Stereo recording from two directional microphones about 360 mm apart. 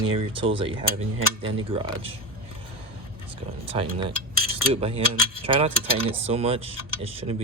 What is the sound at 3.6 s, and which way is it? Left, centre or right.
Speech, centre.